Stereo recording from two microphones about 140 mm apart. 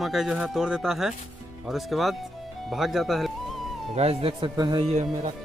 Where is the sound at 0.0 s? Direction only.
5° right (ahead or behind).